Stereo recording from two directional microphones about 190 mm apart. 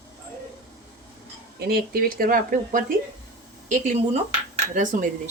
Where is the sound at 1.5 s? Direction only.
55° right (ahead or behind).